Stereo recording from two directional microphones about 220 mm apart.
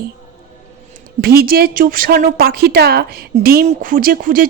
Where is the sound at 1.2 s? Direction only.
45° right (ahead or behind).